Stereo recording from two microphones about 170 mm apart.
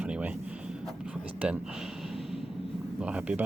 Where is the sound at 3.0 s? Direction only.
5° right (ahead or behind).